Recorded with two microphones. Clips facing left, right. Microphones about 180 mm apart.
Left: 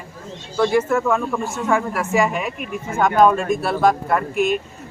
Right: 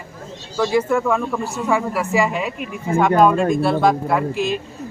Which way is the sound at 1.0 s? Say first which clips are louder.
Even; centre (ahead or behind).